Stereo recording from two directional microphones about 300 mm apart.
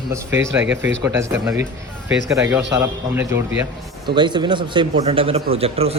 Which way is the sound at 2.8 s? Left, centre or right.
Centre.